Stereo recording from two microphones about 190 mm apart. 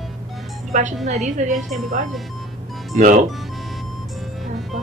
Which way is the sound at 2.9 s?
40° right (ahead or behind).